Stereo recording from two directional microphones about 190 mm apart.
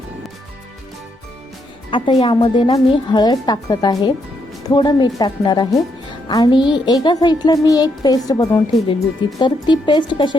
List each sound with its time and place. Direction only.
1.9 s a woman's voice: 25° left (ahead or behind)